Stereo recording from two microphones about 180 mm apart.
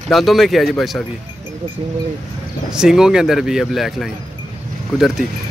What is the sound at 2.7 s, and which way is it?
Speech, 5° right (ahead or behind).